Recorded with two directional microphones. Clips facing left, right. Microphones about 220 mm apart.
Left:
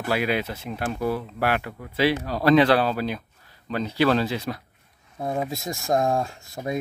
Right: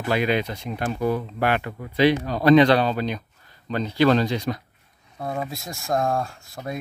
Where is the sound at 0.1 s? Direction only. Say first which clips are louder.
Right 2 dB; 5° left (ahead or behind).